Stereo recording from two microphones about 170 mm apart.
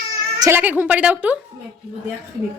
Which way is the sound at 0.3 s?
20° right (ahead or behind).